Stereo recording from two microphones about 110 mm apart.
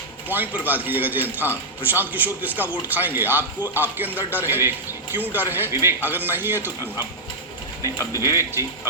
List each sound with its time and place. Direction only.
0.3 s speech: 15° right (ahead or behind)
8.4 s speech: 25° right (ahead or behind)